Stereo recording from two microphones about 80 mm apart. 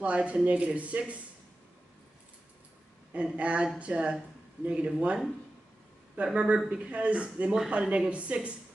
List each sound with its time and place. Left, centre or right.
0.0 s speech: centre
3.1 s speech: centre